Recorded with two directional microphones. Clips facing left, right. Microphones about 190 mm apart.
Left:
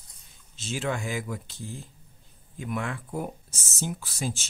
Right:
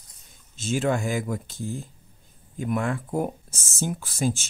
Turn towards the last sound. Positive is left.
turn(degrees=-50)  # may be behind; listen again after turning